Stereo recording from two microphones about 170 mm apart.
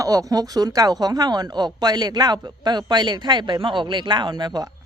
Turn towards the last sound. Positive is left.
turn(degrees=-25)  # may be behind; listen again after turning